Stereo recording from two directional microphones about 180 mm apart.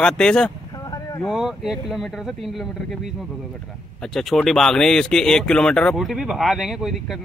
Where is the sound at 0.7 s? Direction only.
20° left (ahead or behind).